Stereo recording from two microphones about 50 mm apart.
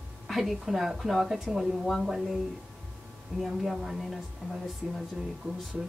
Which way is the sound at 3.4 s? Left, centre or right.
Centre.